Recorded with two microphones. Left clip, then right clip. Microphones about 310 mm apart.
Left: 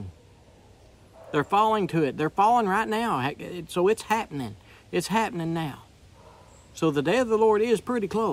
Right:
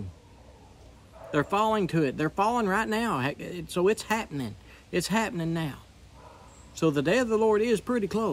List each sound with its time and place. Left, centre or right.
1.3 s speech: centre